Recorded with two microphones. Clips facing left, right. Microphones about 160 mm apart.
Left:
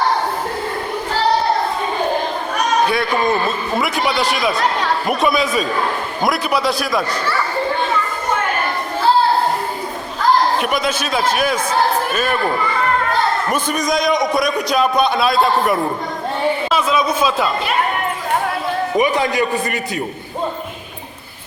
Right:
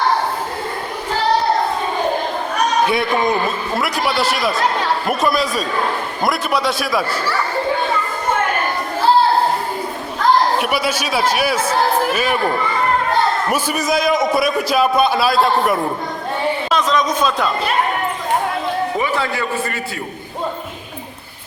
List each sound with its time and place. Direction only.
2.8 s a man's voice: 20° right (ahead or behind)
3.8 s a man's voice: centre (ahead or behind)
10.6 s a man's voice: 5° right (ahead or behind)
13.5 s a man's voice: 5° right (ahead or behind)
18.9 s a man's voice: 15° left (ahead or behind)